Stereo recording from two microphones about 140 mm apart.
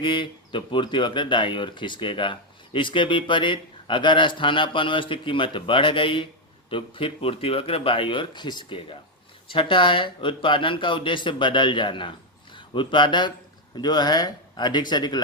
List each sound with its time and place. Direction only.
0.0 s speech: 35° left (ahead or behind)